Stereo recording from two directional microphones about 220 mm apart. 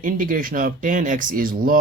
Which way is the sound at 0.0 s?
40° right (ahead or behind).